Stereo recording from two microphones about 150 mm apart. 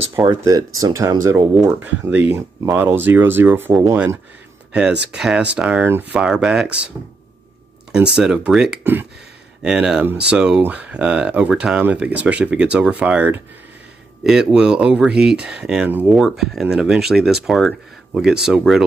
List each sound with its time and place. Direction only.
0.1 s speech: 20° right (ahead or behind)
1.8 s speech: 10° right (ahead or behind)
4.7 s speech: 5° right (ahead or behind)
7.9 s speech: 5° right (ahead or behind)